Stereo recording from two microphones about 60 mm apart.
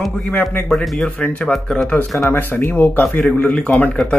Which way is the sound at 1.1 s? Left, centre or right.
Left.